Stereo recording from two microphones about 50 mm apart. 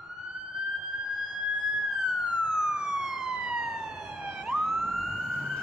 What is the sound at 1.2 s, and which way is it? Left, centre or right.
Emergency vehicle, centre.